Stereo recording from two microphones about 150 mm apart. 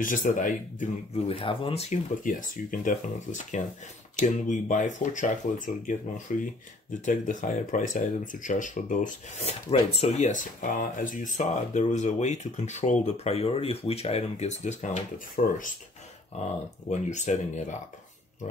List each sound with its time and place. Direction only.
0.0 s speech: 60° left (ahead or behind); by 2.0 s 40° left (ahead or behind)
2.2 s speech: 60° left (ahead or behind)
16.9 s speech: 50° left (ahead or behind)